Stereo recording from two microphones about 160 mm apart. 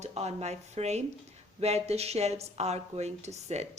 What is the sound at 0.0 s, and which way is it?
Speech, 40° right (ahead or behind).